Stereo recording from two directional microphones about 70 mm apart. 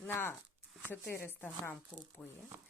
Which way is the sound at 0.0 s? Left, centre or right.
Left.